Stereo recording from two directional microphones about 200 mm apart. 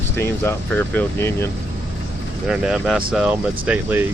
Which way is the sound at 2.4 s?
5° right (ahead or behind).